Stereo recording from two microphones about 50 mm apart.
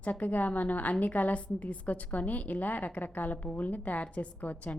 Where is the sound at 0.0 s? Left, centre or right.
Left.